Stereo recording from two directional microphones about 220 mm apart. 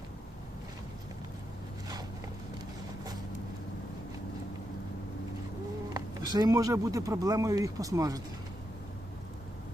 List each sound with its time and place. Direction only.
5.9 s speech: 20° right (ahead or behind)